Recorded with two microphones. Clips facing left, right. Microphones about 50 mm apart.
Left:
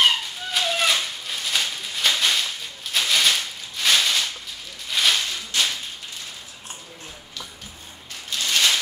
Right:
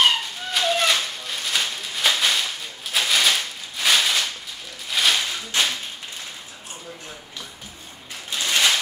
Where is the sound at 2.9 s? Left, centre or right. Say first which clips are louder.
Right 1 dB; centre.